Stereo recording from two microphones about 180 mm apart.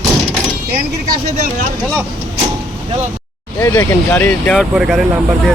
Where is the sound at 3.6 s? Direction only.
10° left (ahead or behind).